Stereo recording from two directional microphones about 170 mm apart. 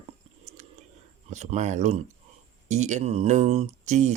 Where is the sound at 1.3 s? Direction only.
40° right (ahead or behind).